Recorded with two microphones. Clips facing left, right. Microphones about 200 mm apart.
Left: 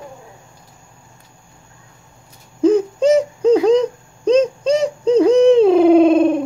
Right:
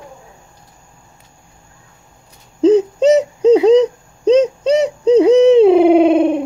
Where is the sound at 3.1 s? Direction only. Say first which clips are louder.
Right 3 dB; 20° right (ahead or behind).